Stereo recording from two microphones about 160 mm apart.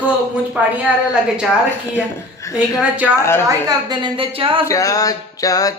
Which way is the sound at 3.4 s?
25° right (ahead or behind).